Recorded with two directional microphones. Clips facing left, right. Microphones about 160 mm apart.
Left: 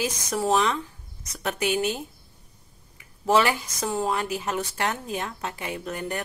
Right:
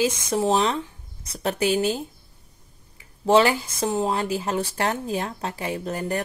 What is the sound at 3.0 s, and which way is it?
Speech, 30° right (ahead or behind).